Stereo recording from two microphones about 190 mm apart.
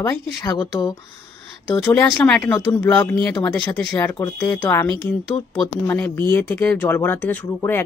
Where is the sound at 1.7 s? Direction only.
5° left (ahead or behind).